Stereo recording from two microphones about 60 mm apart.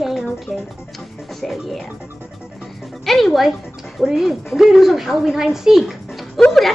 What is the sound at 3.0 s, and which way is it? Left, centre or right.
A woman's voice, centre.